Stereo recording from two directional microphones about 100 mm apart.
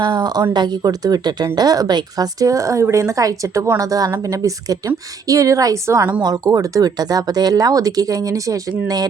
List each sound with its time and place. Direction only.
0.0 s a woman's voice: 45° right (ahead or behind)